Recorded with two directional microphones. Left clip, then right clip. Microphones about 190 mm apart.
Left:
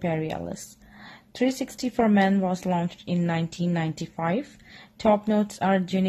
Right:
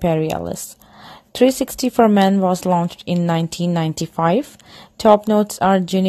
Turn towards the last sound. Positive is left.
turn(degrees=-30)  # may be behind; listen again after turning